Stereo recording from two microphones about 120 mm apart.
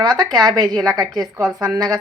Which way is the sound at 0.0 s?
35° right (ahead or behind).